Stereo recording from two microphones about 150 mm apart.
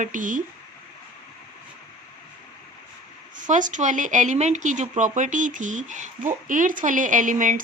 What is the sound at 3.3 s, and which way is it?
Speech, 60° right (ahead or behind).